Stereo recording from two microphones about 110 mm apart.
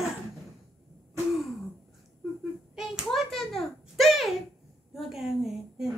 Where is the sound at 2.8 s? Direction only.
Centre (ahead or behind).